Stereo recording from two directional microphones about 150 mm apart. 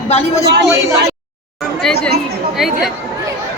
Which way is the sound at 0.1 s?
45° left (ahead or behind).